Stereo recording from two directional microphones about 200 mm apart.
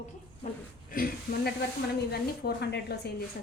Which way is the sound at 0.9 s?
45° left (ahead or behind).